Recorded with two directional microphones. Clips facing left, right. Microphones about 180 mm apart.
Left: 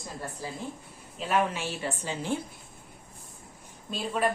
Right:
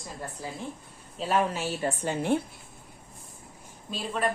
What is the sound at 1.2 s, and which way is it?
A woman's voice, 40° right (ahead or behind).